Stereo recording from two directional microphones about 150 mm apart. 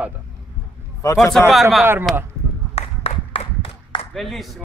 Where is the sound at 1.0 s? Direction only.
20° left (ahead or behind).